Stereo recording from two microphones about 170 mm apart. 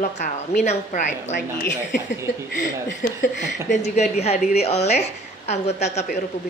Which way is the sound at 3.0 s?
60° left (ahead or behind).